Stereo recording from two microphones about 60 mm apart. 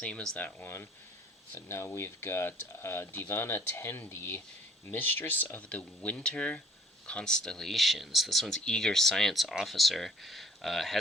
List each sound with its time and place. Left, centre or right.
0.0 s speech: centre
0.3 s speech: left
1.5 s speech: left; by 10.9 s centre